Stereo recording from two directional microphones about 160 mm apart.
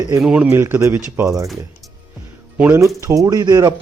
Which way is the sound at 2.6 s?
15° right (ahead or behind).